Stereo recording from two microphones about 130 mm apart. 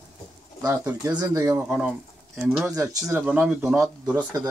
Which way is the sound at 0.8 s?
25° right (ahead or behind).